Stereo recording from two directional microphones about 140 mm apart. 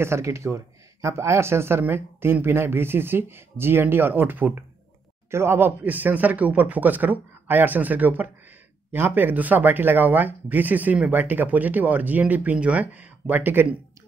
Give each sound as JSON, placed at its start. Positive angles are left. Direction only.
{"t": 0.0, "sound": "speech", "side_deg": -20}